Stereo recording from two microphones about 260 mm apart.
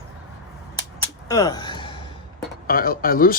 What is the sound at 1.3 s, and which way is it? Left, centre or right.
Speech, centre.